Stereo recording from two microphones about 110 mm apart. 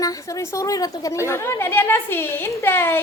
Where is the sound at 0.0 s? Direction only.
30° left (ahead or behind).